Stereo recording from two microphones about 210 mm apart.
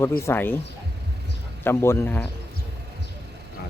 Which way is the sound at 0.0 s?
10° left (ahead or behind).